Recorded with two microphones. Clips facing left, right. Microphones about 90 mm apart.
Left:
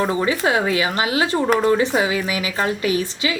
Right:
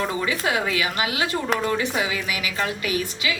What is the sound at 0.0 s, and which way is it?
Speech, 30° left (ahead or behind).